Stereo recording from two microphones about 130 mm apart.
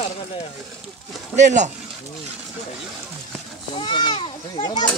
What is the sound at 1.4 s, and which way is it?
Speech, 65° right (ahead or behind).